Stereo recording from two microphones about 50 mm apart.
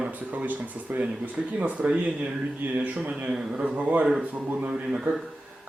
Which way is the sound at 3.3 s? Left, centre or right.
Centre.